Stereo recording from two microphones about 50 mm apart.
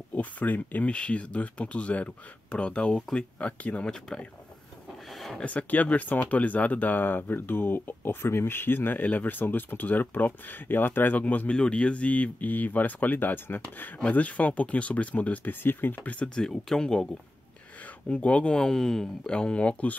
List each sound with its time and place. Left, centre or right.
0.1 s speech: left
0.8 s speech: left
5.1 s speech: centre
5.4 s speech: left
11.5 s speech: left
15.6 s speech: left
16.2 s speech: centre
18.1 s speech: left
18.8 s speech: centre
19.3 s speech: centre